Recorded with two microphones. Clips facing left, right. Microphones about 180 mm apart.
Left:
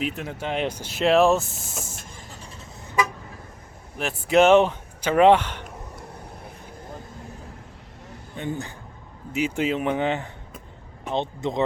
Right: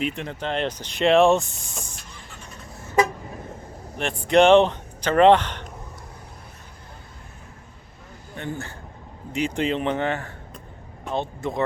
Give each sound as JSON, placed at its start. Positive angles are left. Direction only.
{"t": 0.0, "sound": "speech", "side_deg": 5}
{"t": 2.0, "sound": "vehicle", "side_deg": 45}
{"t": 3.9, "sound": "speech", "side_deg": 5}
{"t": 8.4, "sound": "speech", "side_deg": 15}
{"t": 9.3, "sound": "speech", "side_deg": 5}